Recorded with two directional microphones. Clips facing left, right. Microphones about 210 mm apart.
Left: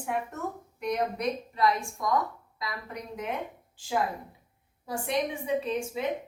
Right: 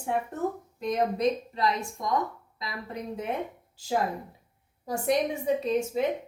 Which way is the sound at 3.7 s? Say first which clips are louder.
Right 2 dB; 40° right (ahead or behind).